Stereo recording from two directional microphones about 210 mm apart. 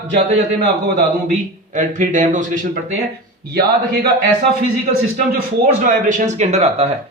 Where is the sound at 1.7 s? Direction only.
35° right (ahead or behind).